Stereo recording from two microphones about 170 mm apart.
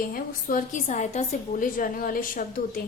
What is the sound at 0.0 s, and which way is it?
A woman's voice, 55° left (ahead or behind).